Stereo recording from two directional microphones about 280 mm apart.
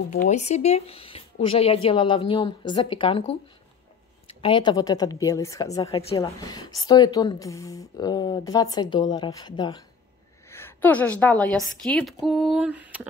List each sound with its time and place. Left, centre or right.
0.1 s a woman's voice: left; by 13.1 s centre